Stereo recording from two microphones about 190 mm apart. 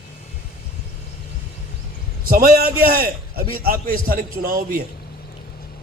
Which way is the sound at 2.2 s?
50° right (ahead or behind).